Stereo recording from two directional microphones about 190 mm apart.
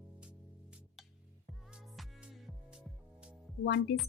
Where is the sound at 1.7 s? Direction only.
Centre (ahead or behind).